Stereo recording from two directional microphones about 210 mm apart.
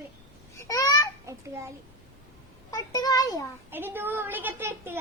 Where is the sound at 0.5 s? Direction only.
15° left (ahead or behind).